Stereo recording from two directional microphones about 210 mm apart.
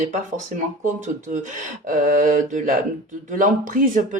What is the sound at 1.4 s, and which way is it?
Speech, 40° right (ahead or behind).